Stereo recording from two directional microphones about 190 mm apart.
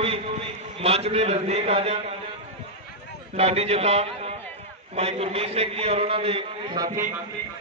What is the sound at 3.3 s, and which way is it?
A man's voice, 35° right (ahead or behind).